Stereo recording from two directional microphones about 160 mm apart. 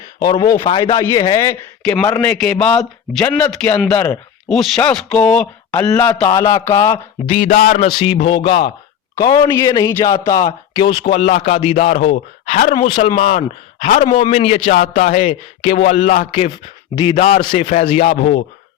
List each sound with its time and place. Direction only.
0.2 s speech: 25° left (ahead or behind)
0.6 s speech: 35° left (ahead or behind)
2.2 s a man's voice: 5° left (ahead or behind)
7.3 s a man's voice: 40° left (ahead or behind)
7.5 s a sound: 55° left (ahead or behind)
7.8 s a man's voice: 35° left (ahead or behind)
11.0 s speech: 45° left (ahead or behind)
14.2 s a man's voice: 35° left (ahead or behind)
14.7 s speech: 55° left (ahead or behind)
17.2 s a man's voice: 45° left (ahead or behind)